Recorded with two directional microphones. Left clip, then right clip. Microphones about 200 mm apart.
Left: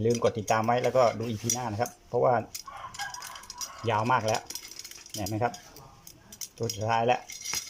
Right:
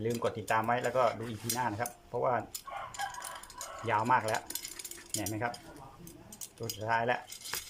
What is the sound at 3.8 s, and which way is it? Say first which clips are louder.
Speech: left 3 dB; 10° left (ahead or behind).